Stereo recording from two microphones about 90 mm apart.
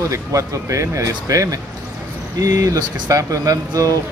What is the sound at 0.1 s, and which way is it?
Speech, 35° right (ahead or behind).